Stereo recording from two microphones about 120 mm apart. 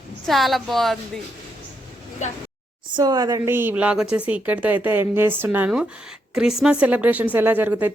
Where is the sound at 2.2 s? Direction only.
75° left (ahead or behind).